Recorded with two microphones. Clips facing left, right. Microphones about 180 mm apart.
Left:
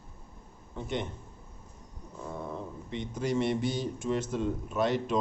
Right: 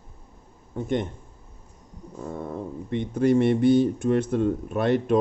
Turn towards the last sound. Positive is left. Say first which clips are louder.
# right 7 dB
turn(degrees=-55)  # may be behind; listen again after turning